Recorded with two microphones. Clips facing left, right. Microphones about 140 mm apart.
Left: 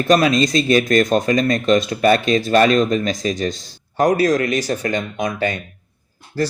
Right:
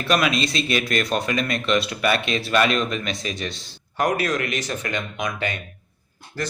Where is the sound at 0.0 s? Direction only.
35° left (ahead or behind).